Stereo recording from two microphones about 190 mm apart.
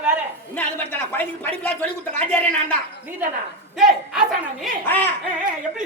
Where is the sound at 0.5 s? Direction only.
10° left (ahead or behind).